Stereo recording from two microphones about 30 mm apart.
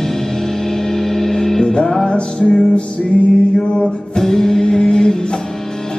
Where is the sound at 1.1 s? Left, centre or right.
Centre.